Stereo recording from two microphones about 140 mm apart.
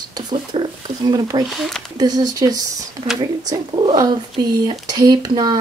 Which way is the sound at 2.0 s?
30° right (ahead or behind).